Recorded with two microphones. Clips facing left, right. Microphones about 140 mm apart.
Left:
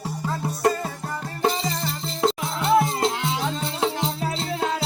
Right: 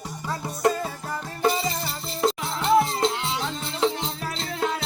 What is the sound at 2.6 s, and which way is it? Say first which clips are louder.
Music: even; 10° left (ahead or behind).